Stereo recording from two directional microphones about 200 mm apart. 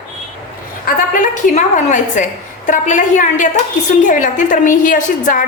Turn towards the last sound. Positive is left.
turn(degrees=40)  # may be behind; listen again after turning